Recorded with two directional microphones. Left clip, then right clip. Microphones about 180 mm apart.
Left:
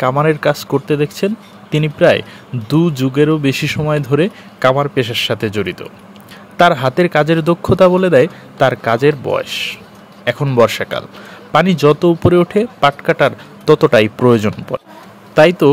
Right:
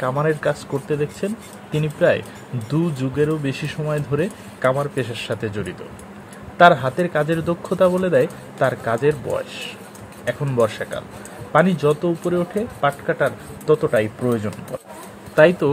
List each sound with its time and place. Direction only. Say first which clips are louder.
0.0 s speech: left 7 dB; 35° left (ahead or behind)